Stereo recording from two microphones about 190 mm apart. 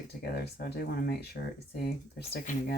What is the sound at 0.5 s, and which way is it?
Speech, 55° left (ahead or behind).